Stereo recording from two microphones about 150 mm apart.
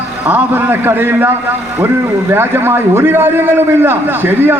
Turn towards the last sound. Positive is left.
turn(degrees=-15)  # may be behind; listen again after turning